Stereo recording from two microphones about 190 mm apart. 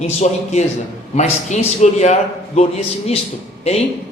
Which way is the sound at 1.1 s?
40° left (ahead or behind).